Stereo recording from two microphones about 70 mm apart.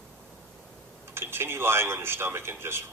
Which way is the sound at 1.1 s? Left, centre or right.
Right.